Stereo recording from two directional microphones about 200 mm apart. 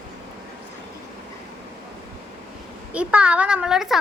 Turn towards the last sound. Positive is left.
turn(degrees=0)  # may be behind; listen again after turning